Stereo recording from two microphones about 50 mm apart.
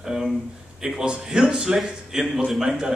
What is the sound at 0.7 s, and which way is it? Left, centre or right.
A man's voice, centre.